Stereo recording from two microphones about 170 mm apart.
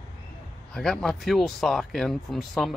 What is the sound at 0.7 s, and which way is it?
Speech, 5° left (ahead or behind).